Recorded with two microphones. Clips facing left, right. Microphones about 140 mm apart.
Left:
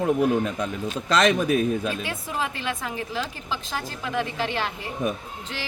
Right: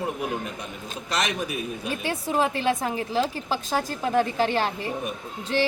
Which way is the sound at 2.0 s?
30° right (ahead or behind).